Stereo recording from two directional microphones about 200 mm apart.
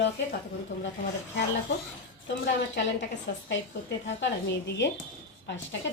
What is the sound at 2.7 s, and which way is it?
A woman's voice, 60° left (ahead or behind).